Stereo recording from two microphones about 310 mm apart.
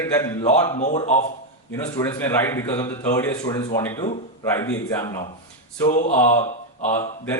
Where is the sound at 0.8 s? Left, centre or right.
Left.